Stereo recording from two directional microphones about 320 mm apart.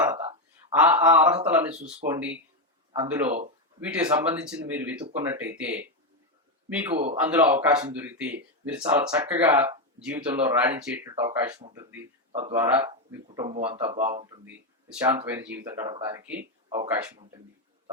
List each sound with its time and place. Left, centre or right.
0.0 s a sound: centre
0.7 s speech: centre
13.9 s speech: right
14.4 s speech: centre